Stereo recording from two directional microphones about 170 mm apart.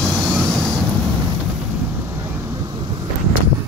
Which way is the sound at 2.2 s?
20° right (ahead or behind).